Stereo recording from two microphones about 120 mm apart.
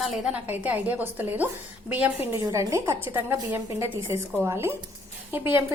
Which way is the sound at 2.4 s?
25° right (ahead or behind).